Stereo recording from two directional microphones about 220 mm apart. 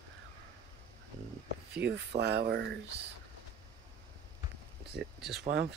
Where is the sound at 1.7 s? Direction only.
50° right (ahead or behind).